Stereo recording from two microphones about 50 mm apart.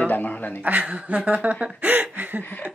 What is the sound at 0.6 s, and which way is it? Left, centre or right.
Speech, right.